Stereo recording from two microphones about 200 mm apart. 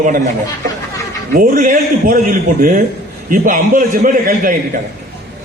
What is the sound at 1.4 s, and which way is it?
A man's voice, 40° right (ahead or behind).